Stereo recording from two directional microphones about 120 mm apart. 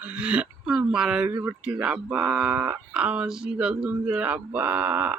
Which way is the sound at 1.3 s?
20° right (ahead or behind).